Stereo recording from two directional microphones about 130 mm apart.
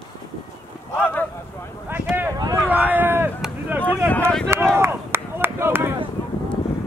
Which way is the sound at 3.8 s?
10° left (ahead or behind).